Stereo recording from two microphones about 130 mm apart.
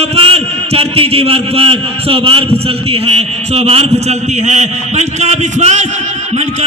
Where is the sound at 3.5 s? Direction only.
50° right (ahead or behind).